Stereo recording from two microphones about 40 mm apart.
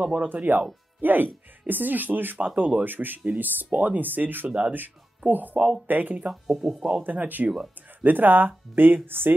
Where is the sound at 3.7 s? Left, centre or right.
Right.